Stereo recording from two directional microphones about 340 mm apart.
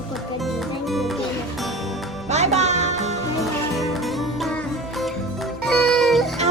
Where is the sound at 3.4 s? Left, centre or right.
Centre.